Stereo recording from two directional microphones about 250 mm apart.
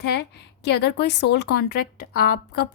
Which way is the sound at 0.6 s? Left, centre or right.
Left.